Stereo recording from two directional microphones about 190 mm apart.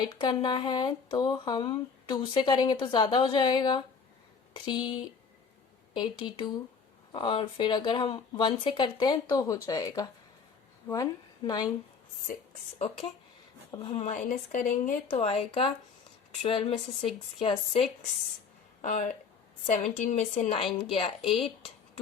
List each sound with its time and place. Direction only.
0.0 s a woman's voice: 20° left (ahead or behind)
13.7 s speech: 20° left (ahead or behind)
14.0 s speech: 40° left (ahead or behind)
15.1 s a woman's voice: 30° left (ahead or behind)
18.8 s a woman's voice: 40° left (ahead or behind)